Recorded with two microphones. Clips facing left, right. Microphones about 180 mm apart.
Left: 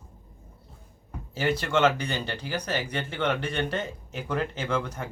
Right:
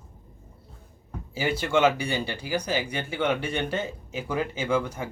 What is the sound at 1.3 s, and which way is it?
Speech, 10° right (ahead or behind).